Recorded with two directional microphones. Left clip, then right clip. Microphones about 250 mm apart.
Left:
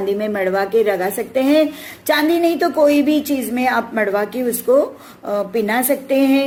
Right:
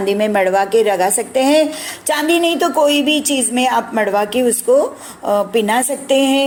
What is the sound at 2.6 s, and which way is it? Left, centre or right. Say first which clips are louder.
A woman's voice: right 1 dB; right.